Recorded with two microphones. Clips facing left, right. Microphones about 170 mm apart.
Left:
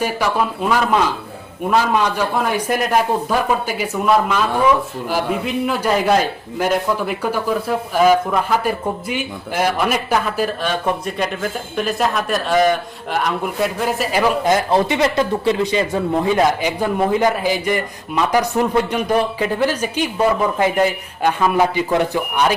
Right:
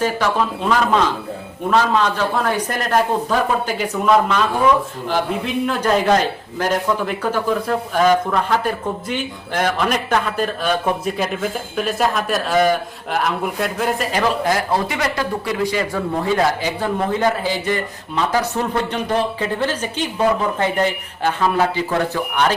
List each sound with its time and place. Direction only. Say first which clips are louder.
0.0 s speech: even; 10° left (ahead or behind)
14.4 s speech: left 3 dB; 20° left (ahead or behind)